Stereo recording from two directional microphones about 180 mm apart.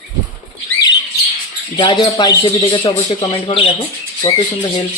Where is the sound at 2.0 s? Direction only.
20° left (ahead or behind).